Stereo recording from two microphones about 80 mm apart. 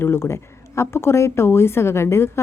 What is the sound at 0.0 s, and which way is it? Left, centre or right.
A woman's voice, left.